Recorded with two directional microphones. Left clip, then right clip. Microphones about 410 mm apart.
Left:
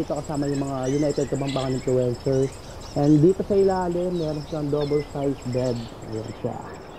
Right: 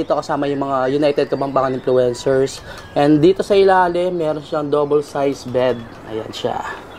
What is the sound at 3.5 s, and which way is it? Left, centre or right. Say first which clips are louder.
Speech: right 9 dB; centre.